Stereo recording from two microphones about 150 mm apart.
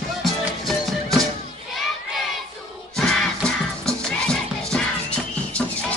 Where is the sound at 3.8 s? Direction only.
5° left (ahead or behind).